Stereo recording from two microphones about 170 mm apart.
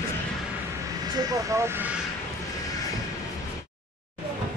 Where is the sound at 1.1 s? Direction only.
15° right (ahead or behind).